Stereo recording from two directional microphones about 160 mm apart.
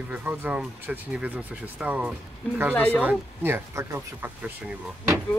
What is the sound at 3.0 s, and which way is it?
Speech, 10° right (ahead or behind).